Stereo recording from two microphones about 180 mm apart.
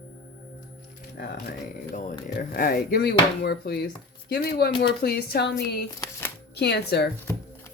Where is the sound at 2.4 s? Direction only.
55° left (ahead or behind).